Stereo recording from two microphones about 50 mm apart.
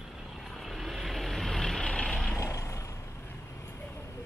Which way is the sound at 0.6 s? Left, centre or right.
Centre.